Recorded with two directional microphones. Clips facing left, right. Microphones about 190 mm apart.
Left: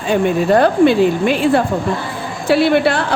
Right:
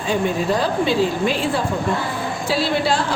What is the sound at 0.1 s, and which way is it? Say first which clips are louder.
Speech: left 7 dB; 60° left (ahead or behind).